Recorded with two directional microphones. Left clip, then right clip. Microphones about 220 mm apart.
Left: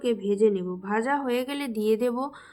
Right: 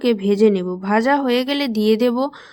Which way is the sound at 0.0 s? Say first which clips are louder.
Right 7 dB; 40° right (ahead or behind).